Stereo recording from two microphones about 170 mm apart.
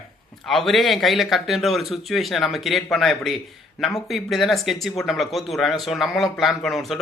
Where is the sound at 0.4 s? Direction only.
Centre (ahead or behind).